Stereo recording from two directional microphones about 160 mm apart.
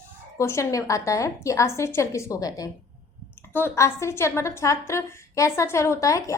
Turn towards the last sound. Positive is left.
turn(degrees=20)  # may be behind; listen again after turning